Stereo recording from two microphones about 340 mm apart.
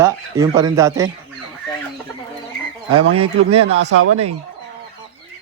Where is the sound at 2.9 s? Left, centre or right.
Right.